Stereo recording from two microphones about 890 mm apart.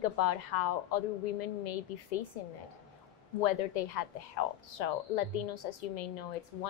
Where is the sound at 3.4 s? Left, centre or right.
Left.